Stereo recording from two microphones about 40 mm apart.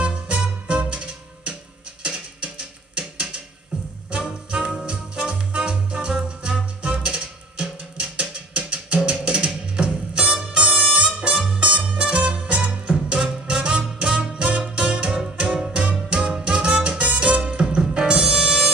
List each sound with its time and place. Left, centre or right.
0.0 s music: right
3.0 s a sound: right
4.1 s music: right